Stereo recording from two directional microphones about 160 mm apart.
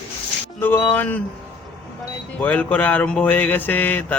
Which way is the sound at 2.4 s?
10° left (ahead or behind).